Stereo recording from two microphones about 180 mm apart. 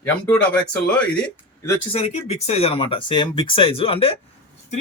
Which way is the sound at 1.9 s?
35° left (ahead or behind).